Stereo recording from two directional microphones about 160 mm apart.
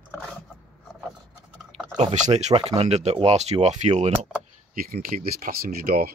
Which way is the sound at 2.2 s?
45° right (ahead or behind).